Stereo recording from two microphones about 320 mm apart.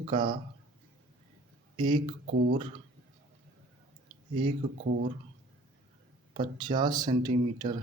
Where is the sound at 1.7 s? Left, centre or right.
Centre.